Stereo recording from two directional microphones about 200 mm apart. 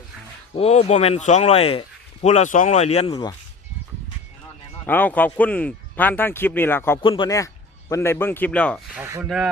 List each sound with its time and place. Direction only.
0.5 s speech: 30° left (ahead or behind)
3.1 s speech: 20° left (ahead or behind)
4.9 s speech: 10° left (ahead or behind)
7.0 s speech: 25° left (ahead or behind); by 8.8 s 5° left (ahead or behind)
9.0 s speech: 10° right (ahead or behind)